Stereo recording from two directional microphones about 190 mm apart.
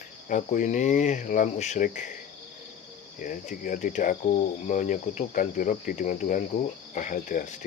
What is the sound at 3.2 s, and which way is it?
Speech, 45° left (ahead or behind).